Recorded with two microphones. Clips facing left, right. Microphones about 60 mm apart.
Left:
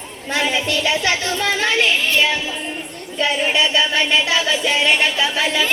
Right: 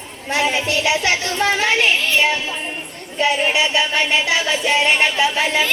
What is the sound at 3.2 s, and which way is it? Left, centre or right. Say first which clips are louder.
Speech: right 2 dB; right.